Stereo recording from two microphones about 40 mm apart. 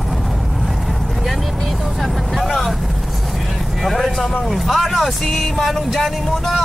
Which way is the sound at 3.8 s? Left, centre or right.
Centre.